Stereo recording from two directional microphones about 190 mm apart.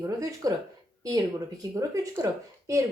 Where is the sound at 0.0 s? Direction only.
20° right (ahead or behind).